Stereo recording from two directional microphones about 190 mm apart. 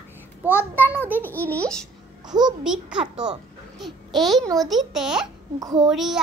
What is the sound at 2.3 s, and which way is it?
Speech, 20° right (ahead or behind).